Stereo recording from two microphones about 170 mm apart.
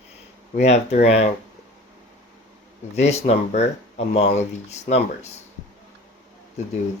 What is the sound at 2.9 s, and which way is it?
Speech, 40° left (ahead or behind).